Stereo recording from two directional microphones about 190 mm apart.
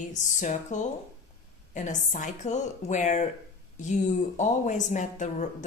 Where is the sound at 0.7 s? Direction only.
40° left (ahead or behind).